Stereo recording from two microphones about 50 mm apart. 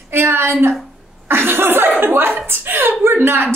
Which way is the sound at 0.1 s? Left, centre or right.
Right.